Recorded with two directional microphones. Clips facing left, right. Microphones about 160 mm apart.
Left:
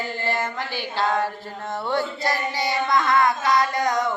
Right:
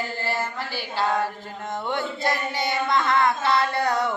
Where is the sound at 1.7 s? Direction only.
20° right (ahead or behind).